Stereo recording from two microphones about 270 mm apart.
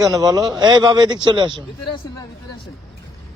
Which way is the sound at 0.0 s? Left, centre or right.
Centre.